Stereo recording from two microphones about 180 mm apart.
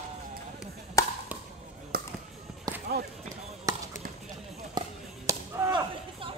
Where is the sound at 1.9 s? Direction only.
55° right (ahead or behind).